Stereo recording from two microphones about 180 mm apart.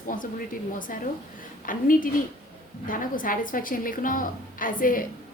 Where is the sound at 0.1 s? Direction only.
50° left (ahead or behind).